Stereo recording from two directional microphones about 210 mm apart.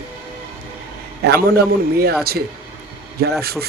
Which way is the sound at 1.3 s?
50° right (ahead or behind).